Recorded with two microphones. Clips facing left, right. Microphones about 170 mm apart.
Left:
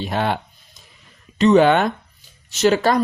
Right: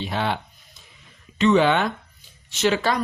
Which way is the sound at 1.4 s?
40° left (ahead or behind).